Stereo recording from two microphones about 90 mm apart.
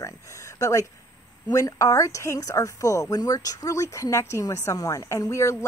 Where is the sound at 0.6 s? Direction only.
35° left (ahead or behind).